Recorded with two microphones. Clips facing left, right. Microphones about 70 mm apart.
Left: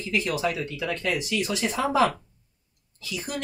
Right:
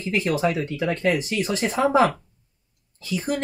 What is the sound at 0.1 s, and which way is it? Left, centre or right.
Speech, right.